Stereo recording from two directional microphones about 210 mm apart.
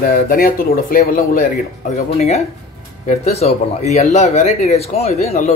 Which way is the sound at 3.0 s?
30° left (ahead or behind).